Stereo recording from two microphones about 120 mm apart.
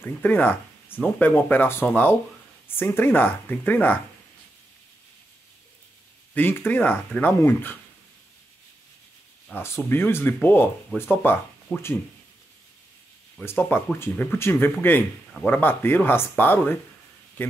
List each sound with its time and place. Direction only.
0.0 s speech: 15° left (ahead or behind)
6.3 s speech: 15° left (ahead or behind)
9.5 s speech: 10° left (ahead or behind)
13.4 s speech: 15° left (ahead or behind)